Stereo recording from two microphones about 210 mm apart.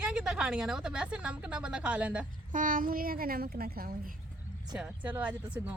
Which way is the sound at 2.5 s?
40° right (ahead or behind).